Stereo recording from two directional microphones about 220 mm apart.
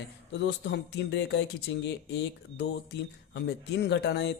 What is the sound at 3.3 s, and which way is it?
Speech, 50° left (ahead or behind).